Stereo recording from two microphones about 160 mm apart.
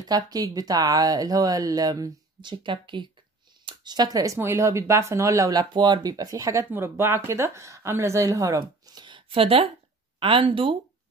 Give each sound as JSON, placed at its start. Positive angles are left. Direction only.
{"t": 0.3, "sound": "speech", "side_deg": -25}